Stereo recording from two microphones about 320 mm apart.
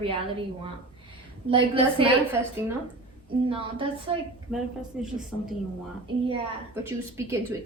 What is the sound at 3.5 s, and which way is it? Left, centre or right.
Speech, centre.